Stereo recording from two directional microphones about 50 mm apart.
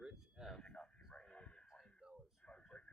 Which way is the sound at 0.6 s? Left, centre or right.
Left.